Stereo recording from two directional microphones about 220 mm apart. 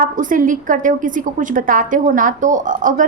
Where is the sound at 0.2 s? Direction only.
35° right (ahead or behind).